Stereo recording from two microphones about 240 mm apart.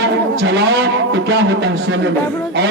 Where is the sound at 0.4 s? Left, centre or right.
Right.